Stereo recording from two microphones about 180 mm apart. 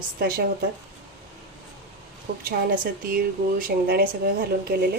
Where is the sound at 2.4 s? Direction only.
55° right (ahead or behind).